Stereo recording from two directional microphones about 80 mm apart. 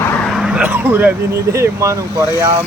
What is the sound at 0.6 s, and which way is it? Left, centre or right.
Speech, right.